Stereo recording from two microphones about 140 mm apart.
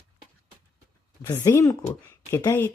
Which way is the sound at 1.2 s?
20° left (ahead or behind).